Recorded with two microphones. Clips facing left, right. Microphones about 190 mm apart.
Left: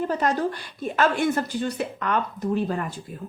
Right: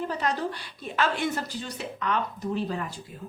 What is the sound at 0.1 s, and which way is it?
A woman's voice, 45° left (ahead or behind).